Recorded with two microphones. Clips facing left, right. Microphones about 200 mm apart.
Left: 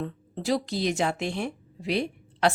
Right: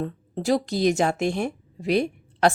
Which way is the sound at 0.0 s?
45° right (ahead or behind).